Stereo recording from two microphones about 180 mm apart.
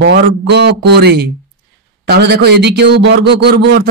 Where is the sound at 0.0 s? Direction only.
70° right (ahead or behind).